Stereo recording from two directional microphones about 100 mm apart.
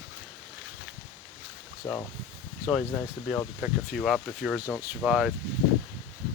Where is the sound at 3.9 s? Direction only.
Centre (ahead or behind).